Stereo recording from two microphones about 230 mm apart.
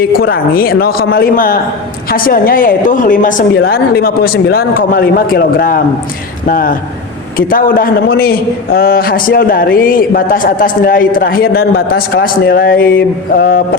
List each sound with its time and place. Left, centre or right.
0.0 s a woman's voice: left